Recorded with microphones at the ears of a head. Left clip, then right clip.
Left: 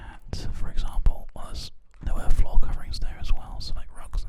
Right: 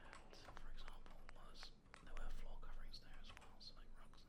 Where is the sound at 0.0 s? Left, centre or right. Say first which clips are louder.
Left 18 dB; left.